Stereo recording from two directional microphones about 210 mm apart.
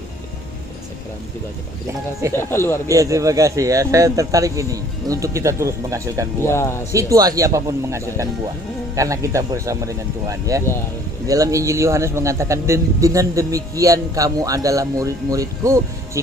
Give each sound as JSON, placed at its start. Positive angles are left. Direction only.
{"t": 2.3, "sound": "speech", "side_deg": 10}
{"t": 2.9, "sound": "a man's voice", "side_deg": -15}
{"t": 6.4, "sound": "speech", "side_deg": 10}
{"t": 6.9, "sound": "a man's voice", "side_deg": -15}